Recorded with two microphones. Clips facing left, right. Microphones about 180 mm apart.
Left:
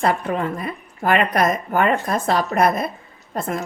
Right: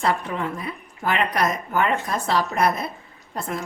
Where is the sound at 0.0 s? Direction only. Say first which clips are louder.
Left 3 dB; 50° left (ahead or behind).